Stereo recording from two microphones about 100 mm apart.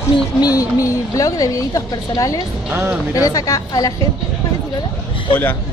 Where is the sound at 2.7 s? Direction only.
20° right (ahead or behind).